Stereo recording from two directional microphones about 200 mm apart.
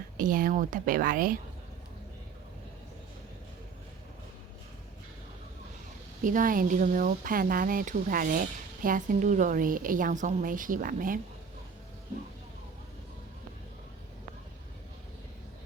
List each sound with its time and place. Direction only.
0.2 s speech: 40° right (ahead or behind)
6.2 s speech: 40° right (ahead or behind)